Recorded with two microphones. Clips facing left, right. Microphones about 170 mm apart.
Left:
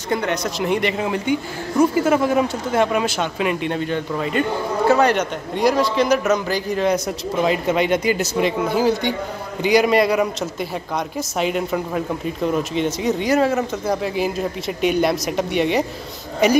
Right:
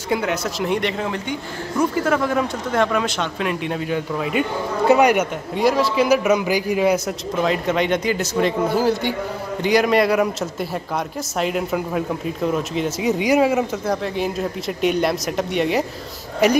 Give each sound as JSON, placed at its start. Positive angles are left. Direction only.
{"t": 0.1, "sound": "a man's voice", "side_deg": -5}
{"t": 2.1, "sound": "speech", "side_deg": 20}
{"t": 2.4, "sound": "a man's voice", "side_deg": 5}
{"t": 5.5, "sound": "a man's voice", "side_deg": 0}
{"t": 7.4, "sound": "a man's voice", "side_deg": 5}
{"t": 8.6, "sound": "a man's voice", "side_deg": -5}
{"t": 13.8, "sound": "a man's voice", "side_deg": 5}